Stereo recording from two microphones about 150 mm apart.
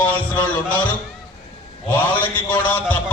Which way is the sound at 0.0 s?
10° left (ahead or behind).